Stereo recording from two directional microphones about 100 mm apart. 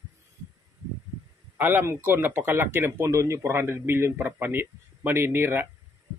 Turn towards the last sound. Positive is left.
turn(degrees=-25)  # may be behind; listen again after turning